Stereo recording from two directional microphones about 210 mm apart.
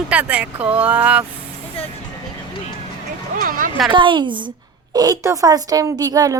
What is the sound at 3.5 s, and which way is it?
Speech, 40° right (ahead or behind).